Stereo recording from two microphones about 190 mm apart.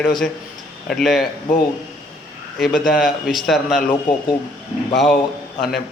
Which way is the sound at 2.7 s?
50° left (ahead or behind).